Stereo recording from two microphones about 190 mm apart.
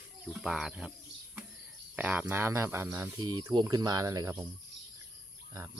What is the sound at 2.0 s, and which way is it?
Speech, 10° right (ahead or behind).